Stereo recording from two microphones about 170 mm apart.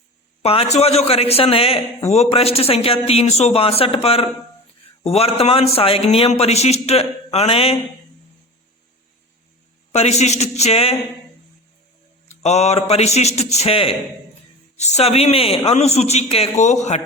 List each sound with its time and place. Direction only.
0.4 s a man's voice: 35° left (ahead or behind)
9.9 s a man's voice: 40° left (ahead or behind)
12.4 s a man's voice: 40° left (ahead or behind)